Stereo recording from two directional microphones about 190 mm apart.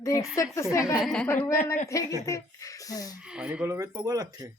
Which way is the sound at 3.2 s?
5° right (ahead or behind).